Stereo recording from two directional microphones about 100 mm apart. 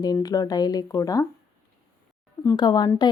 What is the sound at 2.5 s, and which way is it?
Speech, 45° left (ahead or behind).